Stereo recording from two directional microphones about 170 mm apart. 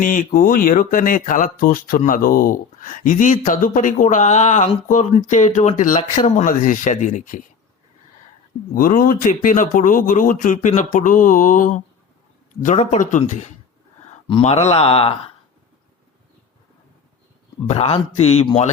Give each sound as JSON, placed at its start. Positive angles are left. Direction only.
{"t": 0.0, "sound": "speech", "side_deg": 50}
{"t": 8.7, "sound": "speech", "side_deg": 55}
{"t": 17.7, "sound": "speech", "side_deg": 35}